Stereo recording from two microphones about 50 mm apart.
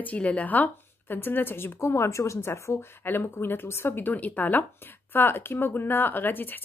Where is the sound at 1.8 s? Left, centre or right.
Left.